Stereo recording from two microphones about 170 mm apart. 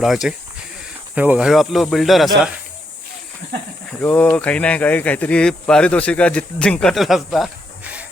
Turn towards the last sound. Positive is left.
turn(degrees=0)  # may be behind; listen again after turning